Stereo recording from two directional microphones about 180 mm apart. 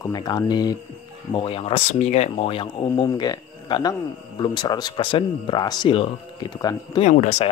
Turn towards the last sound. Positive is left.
turn(degrees=40)  # may be behind; listen again after turning